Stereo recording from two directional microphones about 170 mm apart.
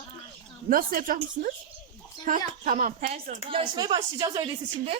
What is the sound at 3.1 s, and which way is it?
Speech, 30° right (ahead or behind).